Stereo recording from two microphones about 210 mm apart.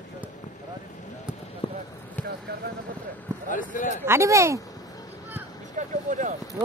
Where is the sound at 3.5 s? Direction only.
40° left (ahead or behind).